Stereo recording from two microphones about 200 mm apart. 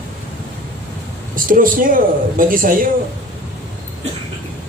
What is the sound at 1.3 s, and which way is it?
Speech, 45° right (ahead or behind).